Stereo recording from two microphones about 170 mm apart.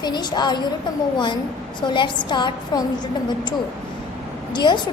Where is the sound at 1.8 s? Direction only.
25° left (ahead or behind).